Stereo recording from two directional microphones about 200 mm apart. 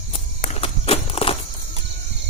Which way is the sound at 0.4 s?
30° left (ahead or behind).